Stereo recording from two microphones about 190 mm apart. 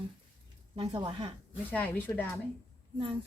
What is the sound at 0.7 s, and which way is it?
Speech, 30° right (ahead or behind).